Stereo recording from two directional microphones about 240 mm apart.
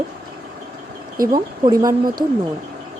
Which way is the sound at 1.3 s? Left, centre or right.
Centre.